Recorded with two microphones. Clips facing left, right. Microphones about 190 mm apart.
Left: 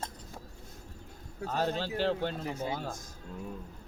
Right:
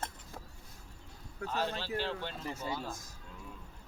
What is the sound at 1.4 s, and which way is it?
Speech, 45° left (ahead or behind).